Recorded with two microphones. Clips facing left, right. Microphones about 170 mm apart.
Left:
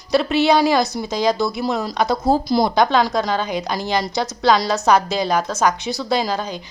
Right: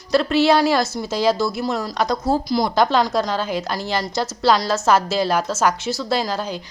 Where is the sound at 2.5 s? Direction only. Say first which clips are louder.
Left 3 dB; 25° left (ahead or behind).